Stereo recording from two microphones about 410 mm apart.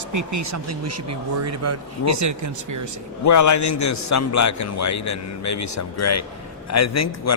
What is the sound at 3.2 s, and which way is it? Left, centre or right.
A man's voice, left.